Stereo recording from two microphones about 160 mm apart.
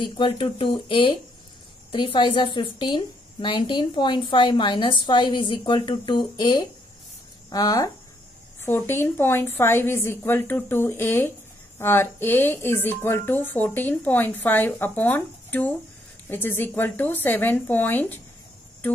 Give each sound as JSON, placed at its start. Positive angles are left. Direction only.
{"t": 0.0, "sound": "a woman's voice", "side_deg": 30}